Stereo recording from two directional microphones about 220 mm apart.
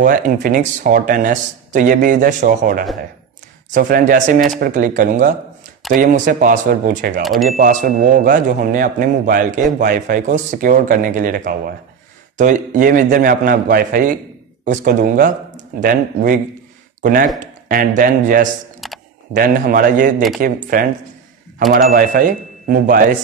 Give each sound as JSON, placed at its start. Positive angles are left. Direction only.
{"t": 0.0, "sound": "speech", "side_deg": -35}
{"t": 18.8, "sound": "computer keyboard", "side_deg": 0}
{"t": 19.3, "sound": "speech", "side_deg": -40}